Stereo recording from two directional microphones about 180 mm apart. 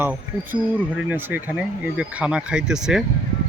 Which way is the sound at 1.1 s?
10° right (ahead or behind).